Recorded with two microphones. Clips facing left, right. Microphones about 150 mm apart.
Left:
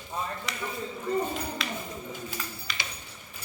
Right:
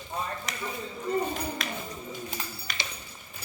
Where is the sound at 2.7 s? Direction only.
50° right (ahead or behind).